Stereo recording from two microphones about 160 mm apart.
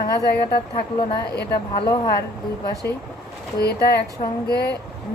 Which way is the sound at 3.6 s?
85° left.